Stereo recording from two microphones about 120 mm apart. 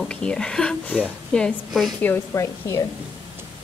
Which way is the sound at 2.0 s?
20° left (ahead or behind).